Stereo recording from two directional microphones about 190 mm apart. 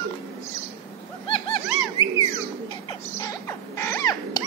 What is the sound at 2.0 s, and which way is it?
Bird, 20° right (ahead or behind).